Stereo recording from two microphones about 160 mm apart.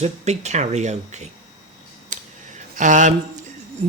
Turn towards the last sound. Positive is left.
turn(degrees=-50)  # may be behind; listen again after turning